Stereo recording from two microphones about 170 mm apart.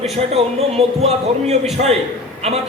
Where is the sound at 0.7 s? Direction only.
35° right (ahead or behind).